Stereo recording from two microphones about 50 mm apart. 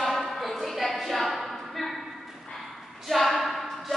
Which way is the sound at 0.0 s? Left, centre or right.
Centre.